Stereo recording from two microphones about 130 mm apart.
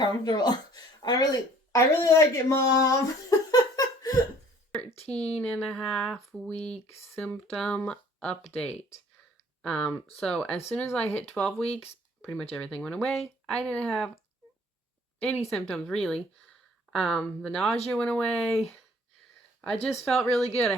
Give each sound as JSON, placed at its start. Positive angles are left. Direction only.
{"t": 0.0, "sound": "speech", "side_deg": 30}
{"t": 5.1, "sound": "speech", "side_deg": 10}
{"t": 11.6, "sound": "speech", "side_deg": 50}
{"t": 12.2, "sound": "speech", "side_deg": 10}
{"t": 15.4, "sound": "speech", "side_deg": 10}